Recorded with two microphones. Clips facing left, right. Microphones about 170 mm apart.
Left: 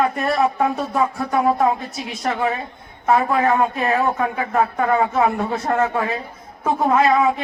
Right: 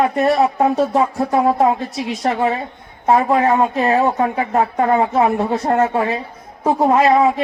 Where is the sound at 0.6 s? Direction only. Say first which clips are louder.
Right 5 dB; 35° right (ahead or behind).